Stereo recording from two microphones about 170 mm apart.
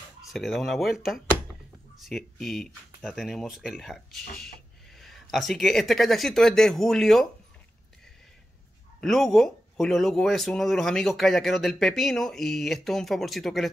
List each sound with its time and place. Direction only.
0.3 s speech: centre (ahead or behind)
9.0 s speech: centre (ahead or behind)